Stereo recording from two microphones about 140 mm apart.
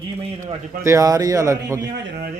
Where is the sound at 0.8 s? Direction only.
20° right (ahead or behind).